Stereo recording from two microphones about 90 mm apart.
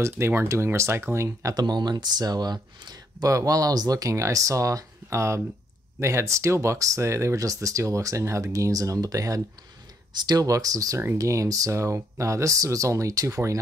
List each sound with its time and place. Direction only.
0.0 s speech: 25° right (ahead or behind)
1.5 s speech: 50° right (ahead or behind)